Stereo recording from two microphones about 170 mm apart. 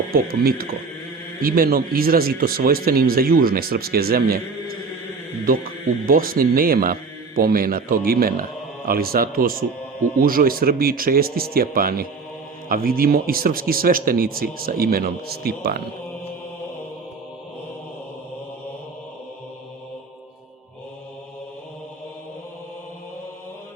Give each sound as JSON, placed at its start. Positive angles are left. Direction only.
{"t": 0.1, "sound": "speech", "side_deg": -60}